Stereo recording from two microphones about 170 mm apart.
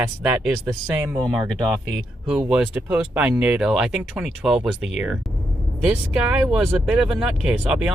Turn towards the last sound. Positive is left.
turn(degrees=-5)  # may be behind; listen again after turning